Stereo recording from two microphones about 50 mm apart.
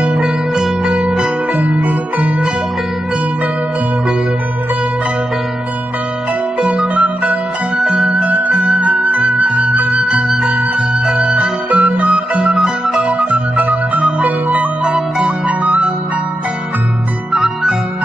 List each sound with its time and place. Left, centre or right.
0.0 s music: centre
1.5 s music: right
6.6 s music: right
12.5 s music: centre
17.3 s music: centre